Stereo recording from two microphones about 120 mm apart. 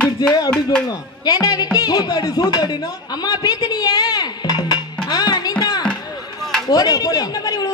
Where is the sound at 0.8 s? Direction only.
35° left (ahead or behind).